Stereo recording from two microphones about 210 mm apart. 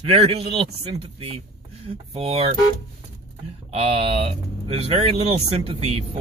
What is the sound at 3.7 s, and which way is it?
Speech, 25° right (ahead or behind).